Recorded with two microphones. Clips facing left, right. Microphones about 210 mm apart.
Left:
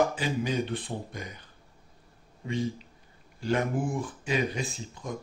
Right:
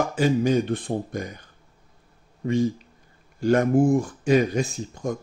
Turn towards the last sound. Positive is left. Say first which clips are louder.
# right 8 dB
turn(degrees=-45)  # may be behind; listen again after turning